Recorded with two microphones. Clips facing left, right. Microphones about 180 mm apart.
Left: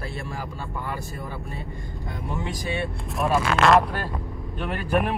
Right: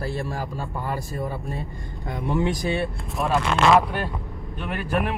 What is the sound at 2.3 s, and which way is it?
Speech, centre (ahead or behind).